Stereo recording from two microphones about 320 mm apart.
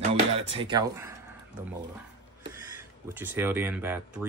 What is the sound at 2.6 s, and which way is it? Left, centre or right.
Speech, centre.